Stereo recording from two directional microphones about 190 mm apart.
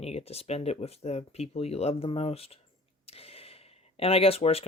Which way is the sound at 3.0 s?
30° left (ahead or behind).